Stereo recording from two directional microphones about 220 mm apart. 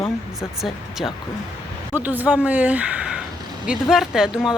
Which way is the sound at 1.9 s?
10° right (ahead or behind).